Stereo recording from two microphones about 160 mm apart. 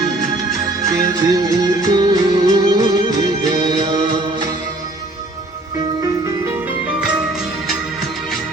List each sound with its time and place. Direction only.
0.8 s music: 20° right (ahead or behind)
7.0 s music: 5° right (ahead or behind)